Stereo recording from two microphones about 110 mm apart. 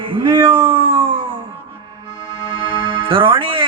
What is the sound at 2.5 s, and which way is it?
Music, 55° right (ahead or behind).